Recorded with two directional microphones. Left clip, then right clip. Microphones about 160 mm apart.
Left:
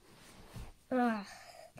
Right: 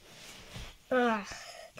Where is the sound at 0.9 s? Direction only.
50° right (ahead or behind).